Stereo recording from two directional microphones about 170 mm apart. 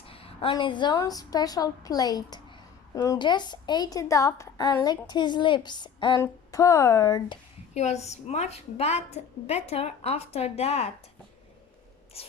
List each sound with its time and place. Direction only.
0.0 s a woman's voice: 35° left (ahead or behind)
7.7 s a woman's voice: 40° left (ahead or behind)
12.1 s a sound: 35° left (ahead or behind)